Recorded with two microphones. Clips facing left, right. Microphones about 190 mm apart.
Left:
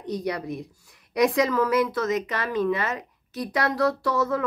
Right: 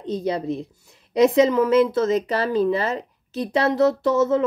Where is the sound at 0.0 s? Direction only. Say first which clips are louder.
Right 4 dB; 25° right (ahead or behind).